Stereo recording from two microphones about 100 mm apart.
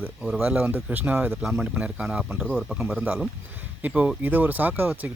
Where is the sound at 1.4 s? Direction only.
10° right (ahead or behind).